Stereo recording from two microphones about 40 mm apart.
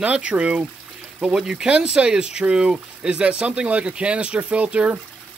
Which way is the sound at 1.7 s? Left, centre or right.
Right.